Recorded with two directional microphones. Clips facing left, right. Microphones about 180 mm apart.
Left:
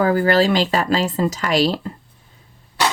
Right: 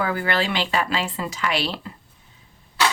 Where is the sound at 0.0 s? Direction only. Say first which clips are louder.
Left 8 dB; 40° left (ahead or behind).